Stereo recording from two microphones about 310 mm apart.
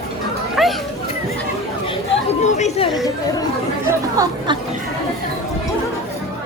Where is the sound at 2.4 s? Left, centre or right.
Left.